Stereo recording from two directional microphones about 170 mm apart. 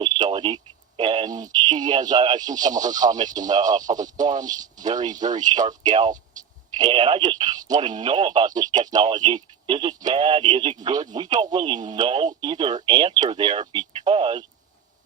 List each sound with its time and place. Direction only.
0.0 s speech: 25° right (ahead or behind)